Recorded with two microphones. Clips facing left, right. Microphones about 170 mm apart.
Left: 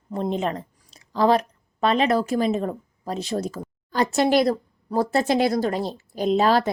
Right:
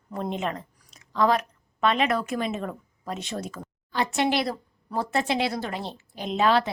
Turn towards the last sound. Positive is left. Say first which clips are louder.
# left 4 dB
turn(degrees=40)  # may be behind; listen again after turning